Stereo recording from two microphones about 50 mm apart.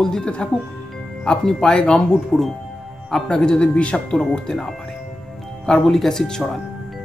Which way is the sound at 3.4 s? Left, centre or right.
Centre.